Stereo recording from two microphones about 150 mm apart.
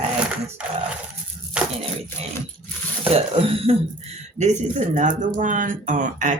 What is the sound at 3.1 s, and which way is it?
Speech, 40° right (ahead or behind).